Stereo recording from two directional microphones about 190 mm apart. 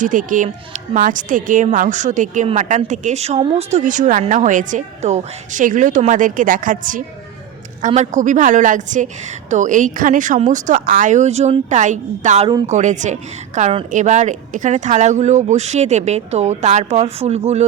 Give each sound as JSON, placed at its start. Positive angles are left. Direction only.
{"t": 0.0, "sound": "a woman's voice", "side_deg": -45}